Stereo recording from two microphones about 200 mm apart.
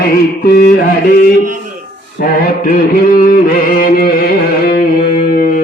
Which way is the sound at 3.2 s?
45° left (ahead or behind).